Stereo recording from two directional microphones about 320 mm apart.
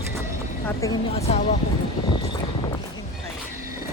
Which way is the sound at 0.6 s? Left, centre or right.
Centre.